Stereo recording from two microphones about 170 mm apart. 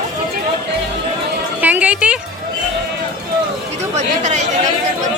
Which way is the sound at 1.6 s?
10° right (ahead or behind).